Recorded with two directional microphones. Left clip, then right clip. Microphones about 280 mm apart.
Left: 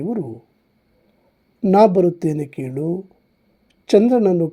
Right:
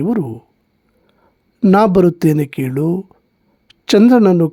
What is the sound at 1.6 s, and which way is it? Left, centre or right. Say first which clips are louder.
Speech: right 2 dB; right.